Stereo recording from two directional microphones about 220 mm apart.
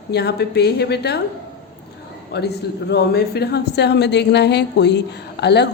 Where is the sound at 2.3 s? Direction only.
50° left (ahead or behind).